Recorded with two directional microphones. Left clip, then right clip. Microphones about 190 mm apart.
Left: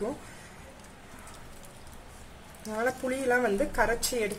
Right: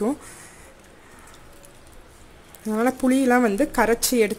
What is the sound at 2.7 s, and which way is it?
Speech, 45° right (ahead or behind).